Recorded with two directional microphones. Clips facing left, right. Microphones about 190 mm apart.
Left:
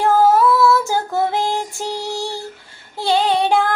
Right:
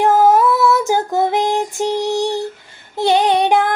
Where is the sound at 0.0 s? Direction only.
20° right (ahead or behind).